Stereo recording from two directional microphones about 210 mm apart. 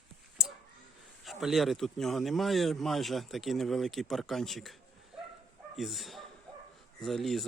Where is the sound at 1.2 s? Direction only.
Centre (ahead or behind).